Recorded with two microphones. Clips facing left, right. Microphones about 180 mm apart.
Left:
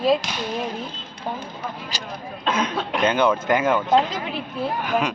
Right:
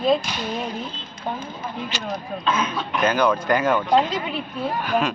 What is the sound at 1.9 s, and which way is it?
Speech, 35° left (ahead or behind).